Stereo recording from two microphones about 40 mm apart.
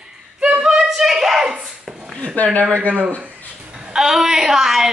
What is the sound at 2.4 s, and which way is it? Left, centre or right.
Speech, left.